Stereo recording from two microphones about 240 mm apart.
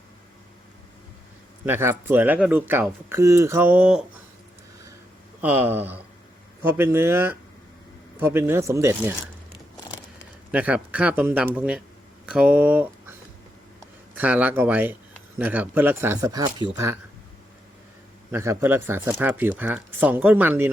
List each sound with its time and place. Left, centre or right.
1.6 s speech: centre
5.4 s speech: centre
10.5 s speech: centre
14.2 s speech: centre
18.3 s speech: centre